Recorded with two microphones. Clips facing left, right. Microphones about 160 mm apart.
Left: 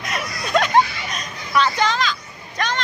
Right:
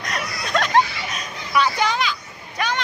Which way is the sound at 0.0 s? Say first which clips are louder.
Left 1 dB; centre (ahead or behind).